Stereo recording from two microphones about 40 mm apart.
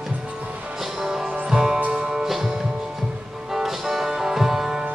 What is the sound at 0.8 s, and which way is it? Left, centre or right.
Music, centre.